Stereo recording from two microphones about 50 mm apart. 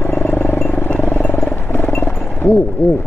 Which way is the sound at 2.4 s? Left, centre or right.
Right.